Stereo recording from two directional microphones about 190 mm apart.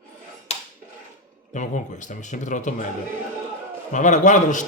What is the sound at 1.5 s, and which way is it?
A man's voice, 40° left (ahead or behind).